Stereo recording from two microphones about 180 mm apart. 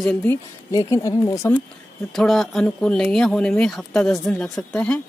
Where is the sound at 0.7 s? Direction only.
20° left (ahead or behind).